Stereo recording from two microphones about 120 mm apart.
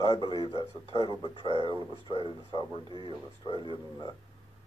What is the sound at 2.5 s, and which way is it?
Speech, 40° left (ahead or behind).